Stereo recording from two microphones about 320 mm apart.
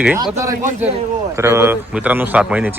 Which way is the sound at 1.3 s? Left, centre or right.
Centre.